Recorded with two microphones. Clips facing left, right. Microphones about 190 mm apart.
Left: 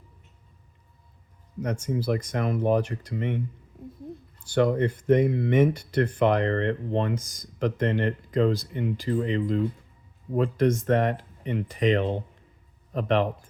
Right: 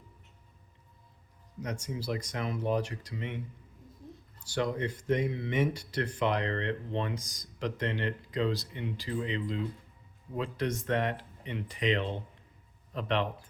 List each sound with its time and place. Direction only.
1.6 s speech: 55° left (ahead or behind)
4.4 s speech: 55° left (ahead or behind)